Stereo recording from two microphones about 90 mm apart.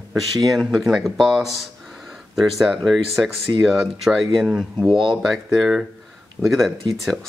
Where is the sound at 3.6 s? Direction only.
5° right (ahead or behind).